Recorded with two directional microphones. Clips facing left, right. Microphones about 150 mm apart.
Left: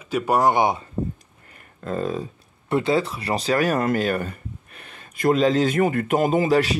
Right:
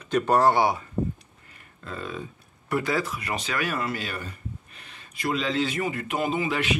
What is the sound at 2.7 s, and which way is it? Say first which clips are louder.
Speech: left 5 dB; 25° left (ahead or behind).